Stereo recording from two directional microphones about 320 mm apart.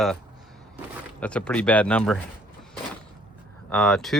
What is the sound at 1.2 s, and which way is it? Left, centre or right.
Speech, centre.